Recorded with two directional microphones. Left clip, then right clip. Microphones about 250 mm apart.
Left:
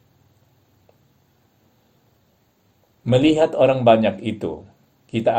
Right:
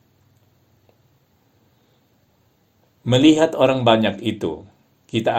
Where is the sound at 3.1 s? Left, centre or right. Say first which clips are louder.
Right 1 dB; right.